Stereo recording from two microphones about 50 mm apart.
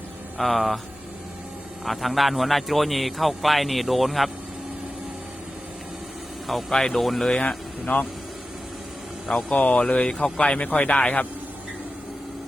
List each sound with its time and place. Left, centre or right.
0.3 s speech: centre
1.8 s speech: centre
6.7 s speech: centre
7.3 s speech: left
9.3 s speech: centre
10.4 s speech: left